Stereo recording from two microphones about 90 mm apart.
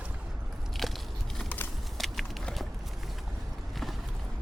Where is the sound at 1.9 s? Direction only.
Centre (ahead or behind).